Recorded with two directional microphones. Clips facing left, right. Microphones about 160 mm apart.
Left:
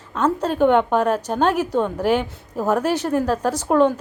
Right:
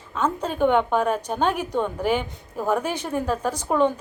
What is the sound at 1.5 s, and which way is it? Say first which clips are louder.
A woman's voice: left 4 dB; 10° left (ahead or behind).